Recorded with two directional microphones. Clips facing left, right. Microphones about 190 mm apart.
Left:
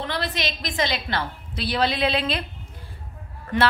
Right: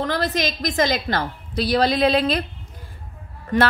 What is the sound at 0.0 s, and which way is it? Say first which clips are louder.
A woman's voice: right 5 dB; 45° right (ahead or behind).